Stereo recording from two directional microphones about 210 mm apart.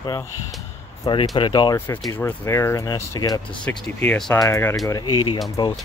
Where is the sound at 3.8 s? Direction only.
5° left (ahead or behind).